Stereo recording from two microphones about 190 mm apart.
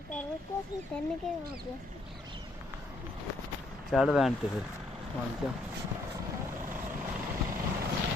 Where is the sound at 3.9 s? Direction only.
Centre (ahead or behind).